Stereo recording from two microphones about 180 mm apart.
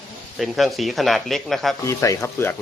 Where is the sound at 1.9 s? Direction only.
15° left (ahead or behind).